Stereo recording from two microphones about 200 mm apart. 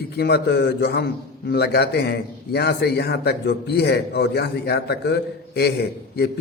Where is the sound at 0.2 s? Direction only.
55° left (ahead or behind).